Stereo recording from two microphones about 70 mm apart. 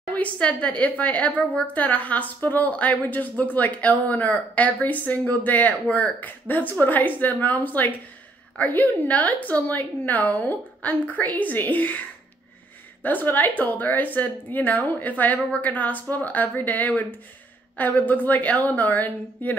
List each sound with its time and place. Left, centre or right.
0.1 s speech: left
13.0 s speech: left